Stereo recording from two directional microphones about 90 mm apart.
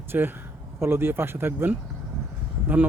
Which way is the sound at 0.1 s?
25° right (ahead or behind).